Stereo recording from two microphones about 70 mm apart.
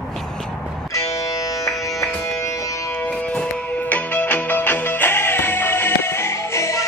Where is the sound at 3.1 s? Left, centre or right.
Centre.